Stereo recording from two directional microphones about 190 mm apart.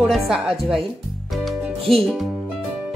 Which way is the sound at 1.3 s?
Centre (ahead or behind).